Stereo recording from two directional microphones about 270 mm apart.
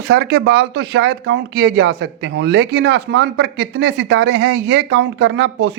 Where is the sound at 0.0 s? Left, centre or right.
Right.